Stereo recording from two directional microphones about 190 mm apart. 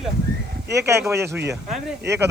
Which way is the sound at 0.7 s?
15° right (ahead or behind).